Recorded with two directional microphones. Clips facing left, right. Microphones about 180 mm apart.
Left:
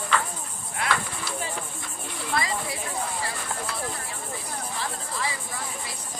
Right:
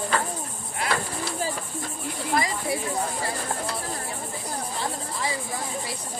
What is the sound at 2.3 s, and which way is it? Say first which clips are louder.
Speech: right 3 dB; 30° right (ahead or behind).